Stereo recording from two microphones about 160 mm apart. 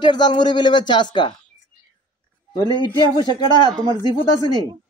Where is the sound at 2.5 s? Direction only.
25° left (ahead or behind).